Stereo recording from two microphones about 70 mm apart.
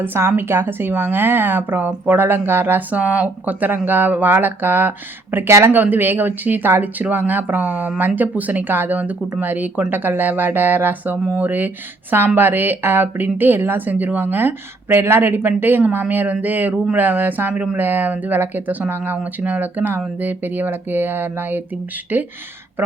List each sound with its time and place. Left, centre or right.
0.0 s a woman's voice: right